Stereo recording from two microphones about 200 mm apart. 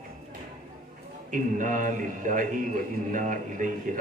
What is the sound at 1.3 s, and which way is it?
A man's voice, 40° right (ahead or behind).